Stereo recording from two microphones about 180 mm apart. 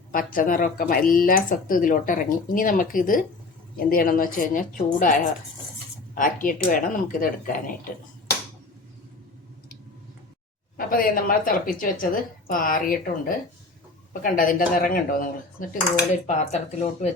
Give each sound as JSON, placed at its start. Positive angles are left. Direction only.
{"t": 0.1, "sound": "speech", "side_deg": 50}
{"t": 10.8, "sound": "speech", "side_deg": 50}
{"t": 15.7, "sound": "cutlery", "side_deg": 40}